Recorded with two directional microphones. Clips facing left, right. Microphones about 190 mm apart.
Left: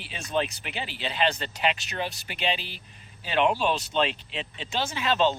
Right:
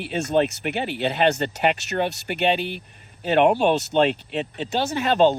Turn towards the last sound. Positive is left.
turn(degrees=-50)  # may be behind; listen again after turning